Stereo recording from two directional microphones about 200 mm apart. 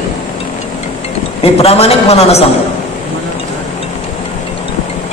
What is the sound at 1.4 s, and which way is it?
A woman's voice, 30° left (ahead or behind).